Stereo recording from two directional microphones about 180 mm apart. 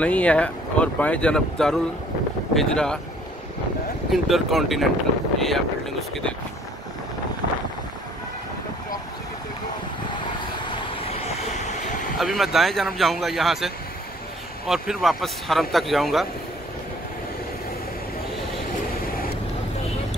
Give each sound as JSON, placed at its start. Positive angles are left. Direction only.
{"t": 0.0, "sound": "speech", "side_deg": 5}
{"t": 4.1, "sound": "speech", "side_deg": 0}
{"t": 10.6, "sound": "vehicle", "side_deg": 35}
{"t": 12.2, "sound": "speech", "side_deg": 0}